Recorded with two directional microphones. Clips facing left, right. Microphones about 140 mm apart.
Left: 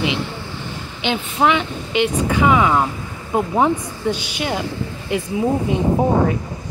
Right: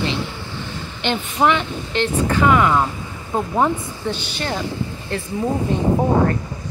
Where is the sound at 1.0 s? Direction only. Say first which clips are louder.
Even; 5° left (ahead or behind).